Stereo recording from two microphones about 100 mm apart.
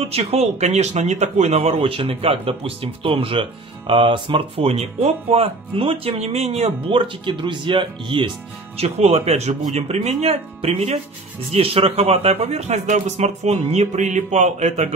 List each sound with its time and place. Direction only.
0.0 s speech: 90° right; by 8.3 s 55° right (ahead or behind)
8.7 s a man's voice: 90° right